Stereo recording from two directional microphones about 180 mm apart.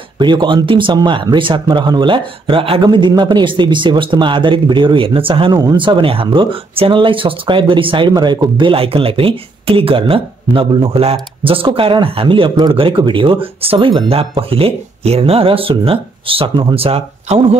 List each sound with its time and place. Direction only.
0.2 s speech: 25° right (ahead or behind)